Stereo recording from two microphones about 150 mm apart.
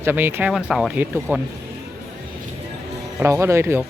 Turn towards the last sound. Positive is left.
turn(degrees=-15)  # may be behind; listen again after turning